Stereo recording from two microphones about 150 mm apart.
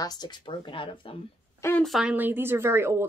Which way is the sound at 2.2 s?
15° right (ahead or behind).